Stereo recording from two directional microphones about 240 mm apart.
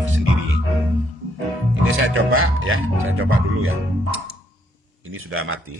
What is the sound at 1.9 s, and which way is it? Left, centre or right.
A man's voice, right.